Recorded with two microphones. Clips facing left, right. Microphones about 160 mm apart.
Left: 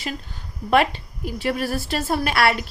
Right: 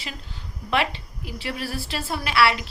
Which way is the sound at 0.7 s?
45° left (ahead or behind).